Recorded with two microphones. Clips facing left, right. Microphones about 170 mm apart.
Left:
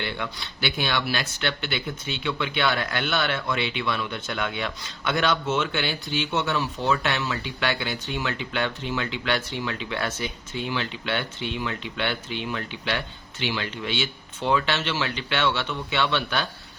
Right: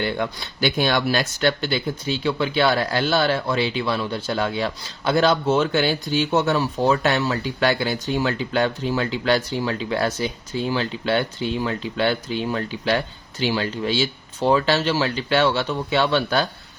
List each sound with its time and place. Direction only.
0.0 s speech: 45° right (ahead or behind)